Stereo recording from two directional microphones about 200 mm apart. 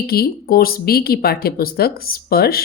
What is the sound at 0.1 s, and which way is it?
Speech, 50° left (ahead or behind).